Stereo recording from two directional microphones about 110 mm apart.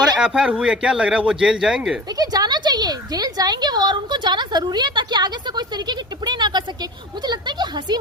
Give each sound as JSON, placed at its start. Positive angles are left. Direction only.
{"t": 0.2, "sound": "speech", "side_deg": -10}
{"t": 2.1, "sound": "a woman's voice", "side_deg": -35}